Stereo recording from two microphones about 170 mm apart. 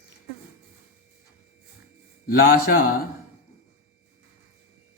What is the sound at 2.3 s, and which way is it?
Speech, 60° left (ahead or behind).